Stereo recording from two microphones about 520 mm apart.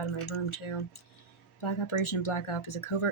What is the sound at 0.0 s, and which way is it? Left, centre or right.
Speech, left.